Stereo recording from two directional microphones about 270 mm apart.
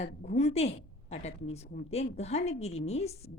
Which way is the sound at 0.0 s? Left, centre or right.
Left.